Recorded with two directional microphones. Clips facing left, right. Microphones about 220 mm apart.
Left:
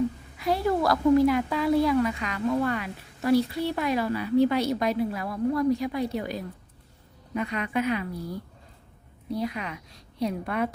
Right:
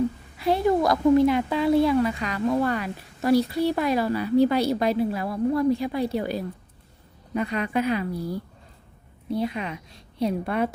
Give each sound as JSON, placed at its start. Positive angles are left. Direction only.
{"t": 0.3, "sound": "a woman's voice", "side_deg": -25}